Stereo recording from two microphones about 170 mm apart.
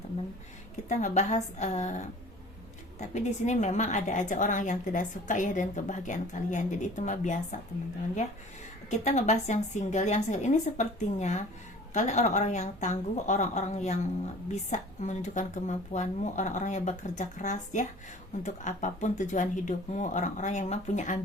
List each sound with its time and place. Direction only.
0.9 s a woman's voice: 45° left (ahead or behind)
8.9 s a woman's voice: 45° left (ahead or behind)